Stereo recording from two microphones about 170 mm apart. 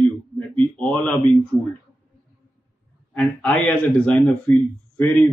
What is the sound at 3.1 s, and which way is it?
A man's voice, 5° left (ahead or behind).